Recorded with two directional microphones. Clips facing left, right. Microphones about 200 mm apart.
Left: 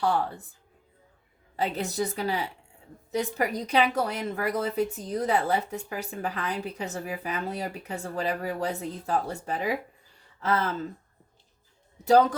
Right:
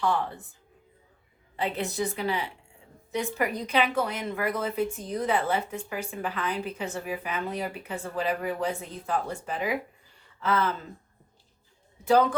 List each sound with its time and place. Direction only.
0.0 s a woman's voice: 35° left (ahead or behind)
1.5 s a woman's voice: 40° left (ahead or behind)